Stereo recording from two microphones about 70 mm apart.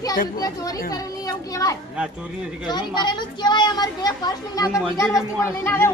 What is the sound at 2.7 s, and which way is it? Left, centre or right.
A child's voice, left.